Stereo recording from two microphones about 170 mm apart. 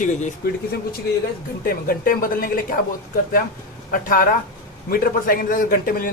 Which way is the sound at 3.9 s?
55° left (ahead or behind).